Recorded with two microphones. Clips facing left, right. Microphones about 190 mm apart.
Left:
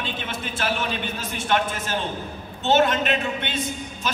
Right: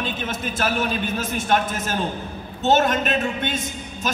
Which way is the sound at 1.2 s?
45° right (ahead or behind).